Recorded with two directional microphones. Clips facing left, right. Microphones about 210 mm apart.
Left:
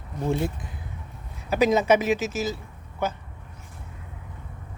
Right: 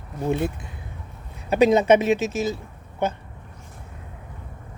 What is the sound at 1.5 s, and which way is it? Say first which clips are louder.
Speech: right 4 dB; 25° right (ahead or behind).